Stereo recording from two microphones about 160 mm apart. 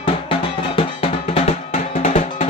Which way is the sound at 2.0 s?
45° left (ahead or behind).